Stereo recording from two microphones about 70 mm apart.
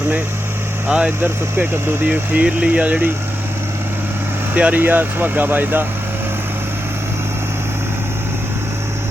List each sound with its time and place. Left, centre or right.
0.9 s speech: centre
4.5 s speech: right